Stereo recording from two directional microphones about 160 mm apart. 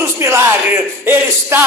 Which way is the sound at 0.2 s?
15° right (ahead or behind).